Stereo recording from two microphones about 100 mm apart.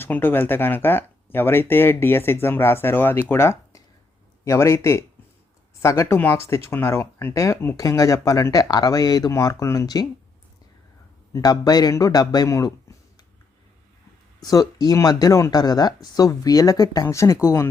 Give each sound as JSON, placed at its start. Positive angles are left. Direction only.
{"t": 0.0, "sound": "speech", "side_deg": 20}
{"t": 11.3, "sound": "speech", "side_deg": 35}
{"t": 14.4, "sound": "speech", "side_deg": 40}